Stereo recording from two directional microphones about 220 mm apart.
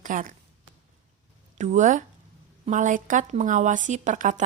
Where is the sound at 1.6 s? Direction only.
35° right (ahead or behind).